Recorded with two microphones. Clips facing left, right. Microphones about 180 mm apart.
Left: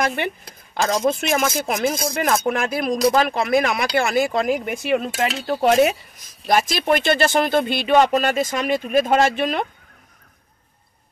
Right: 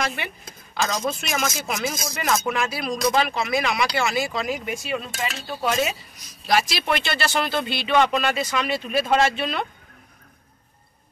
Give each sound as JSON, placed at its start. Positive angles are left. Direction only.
{"t": 0.0, "sound": "speech", "side_deg": 55}
{"t": 3.0, "sound": "speech", "side_deg": 35}
{"t": 3.3, "sound": "speech", "side_deg": 50}